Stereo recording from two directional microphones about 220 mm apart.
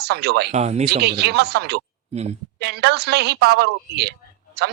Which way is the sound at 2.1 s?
30° right (ahead or behind).